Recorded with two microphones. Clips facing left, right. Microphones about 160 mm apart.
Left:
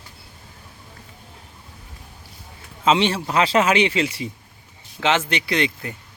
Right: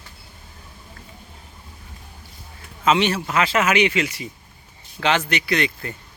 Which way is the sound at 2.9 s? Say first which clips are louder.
Even; 30° left (ahead or behind).